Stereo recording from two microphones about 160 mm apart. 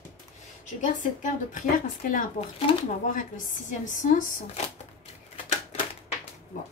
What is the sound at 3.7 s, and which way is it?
Speech, 50° left (ahead or behind).